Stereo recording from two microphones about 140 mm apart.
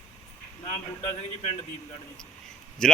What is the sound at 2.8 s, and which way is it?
Speech, 5° left (ahead or behind).